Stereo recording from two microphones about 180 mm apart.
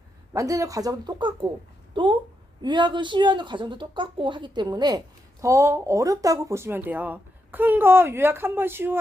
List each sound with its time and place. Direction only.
0.3 s speech: 20° right (ahead or behind)